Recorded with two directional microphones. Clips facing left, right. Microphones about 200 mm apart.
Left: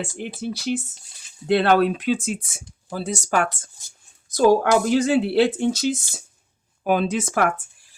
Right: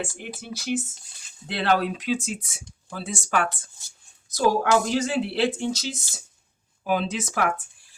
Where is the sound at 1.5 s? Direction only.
55° left (ahead or behind).